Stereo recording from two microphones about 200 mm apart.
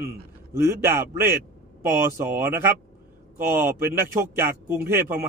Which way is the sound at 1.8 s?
15° right (ahead or behind).